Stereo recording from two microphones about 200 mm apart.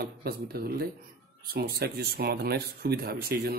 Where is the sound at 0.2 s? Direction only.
50° right (ahead or behind).